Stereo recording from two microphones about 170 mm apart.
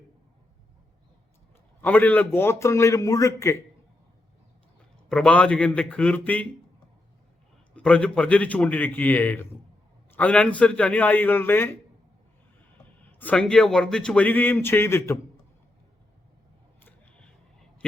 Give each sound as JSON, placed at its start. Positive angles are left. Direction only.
{"t": 1.8, "sound": "speech", "side_deg": 10}
{"t": 5.0, "sound": "speech", "side_deg": 5}
{"t": 7.8, "sound": "speech", "side_deg": 5}
{"t": 13.1, "sound": "speech", "side_deg": 10}
{"t": 16.8, "sound": "scissors", "side_deg": 5}